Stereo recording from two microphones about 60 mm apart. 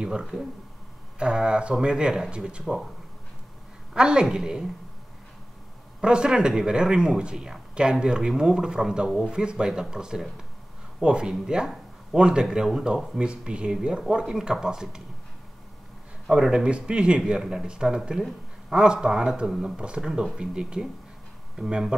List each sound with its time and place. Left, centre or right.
0.0 s speech: centre
2.6 s speech: centre
3.9 s speech: centre
5.9 s speech: centre
16.3 s speech: centre
17.2 s speech: centre